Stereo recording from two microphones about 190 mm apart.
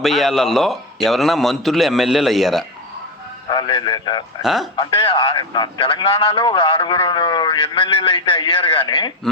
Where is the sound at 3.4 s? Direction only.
25° left (ahead or behind).